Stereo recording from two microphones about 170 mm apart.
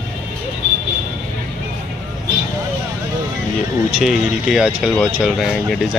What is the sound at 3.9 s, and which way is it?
Speech, 5° right (ahead or behind).